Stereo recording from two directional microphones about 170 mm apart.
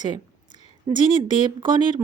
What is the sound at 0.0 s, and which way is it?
A woman's voice, 25° right (ahead or behind).